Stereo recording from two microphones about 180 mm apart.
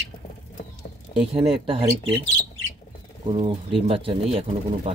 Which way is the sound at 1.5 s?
30° right (ahead or behind).